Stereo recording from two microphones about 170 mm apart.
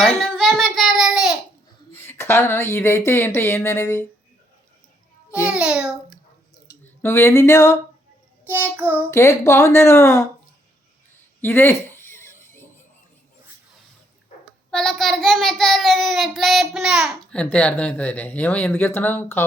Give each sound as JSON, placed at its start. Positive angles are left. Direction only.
{"t": 0.0, "sound": "a sound", "side_deg": 0}
{"t": 1.9, "sound": "speech", "side_deg": 15}
{"t": 5.5, "sound": "a child's voice", "side_deg": -5}
{"t": 7.0, "sound": "speech", "side_deg": 15}
{"t": 8.4, "sound": "child singing", "side_deg": -10}
{"t": 9.0, "sound": "speech", "side_deg": 15}
{"t": 11.3, "sound": "a sound", "side_deg": 10}
{"t": 14.7, "sound": "a child's voice", "side_deg": 5}
{"t": 17.4, "sound": "speech", "side_deg": 10}